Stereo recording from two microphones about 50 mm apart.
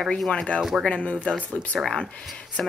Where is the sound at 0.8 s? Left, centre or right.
Left.